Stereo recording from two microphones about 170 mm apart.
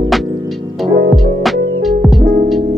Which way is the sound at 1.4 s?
Centre (ahead or behind).